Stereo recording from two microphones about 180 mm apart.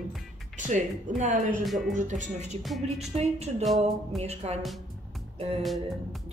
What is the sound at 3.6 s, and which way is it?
Speech, centre (ahead or behind).